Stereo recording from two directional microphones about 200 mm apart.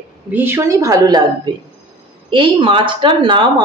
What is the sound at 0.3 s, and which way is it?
Speech, 10° right (ahead or behind).